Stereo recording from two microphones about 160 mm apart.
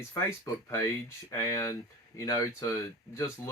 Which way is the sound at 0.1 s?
15° left (ahead or behind).